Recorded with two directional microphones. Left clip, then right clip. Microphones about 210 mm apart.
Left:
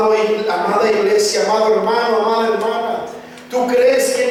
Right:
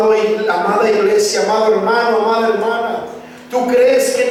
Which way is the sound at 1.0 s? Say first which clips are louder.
Right 1 dB; 10° right (ahead or behind).